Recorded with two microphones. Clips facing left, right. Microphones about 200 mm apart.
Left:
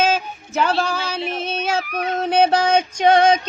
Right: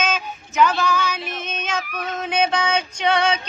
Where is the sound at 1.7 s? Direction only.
35° left (ahead or behind).